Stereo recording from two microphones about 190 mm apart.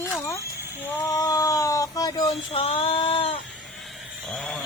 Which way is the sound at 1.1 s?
20° left (ahead or behind).